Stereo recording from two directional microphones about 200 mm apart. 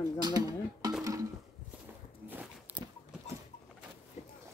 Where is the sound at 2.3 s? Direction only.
5° right (ahead or behind).